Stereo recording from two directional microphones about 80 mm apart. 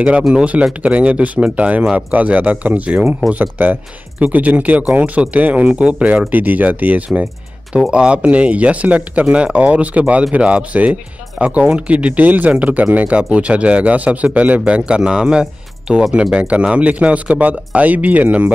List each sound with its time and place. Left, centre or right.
0.3 s speech: centre